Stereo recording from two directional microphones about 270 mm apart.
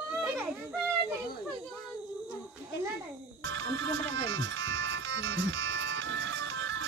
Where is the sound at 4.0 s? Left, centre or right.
Right.